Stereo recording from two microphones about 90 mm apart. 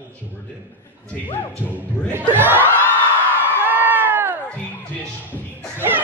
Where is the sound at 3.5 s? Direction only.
20° right (ahead or behind).